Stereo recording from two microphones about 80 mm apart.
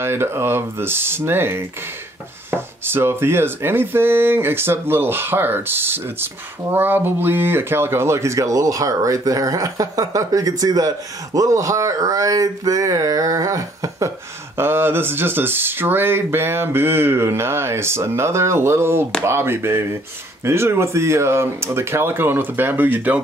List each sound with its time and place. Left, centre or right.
0.0 s speech: right
14.6 s speech: right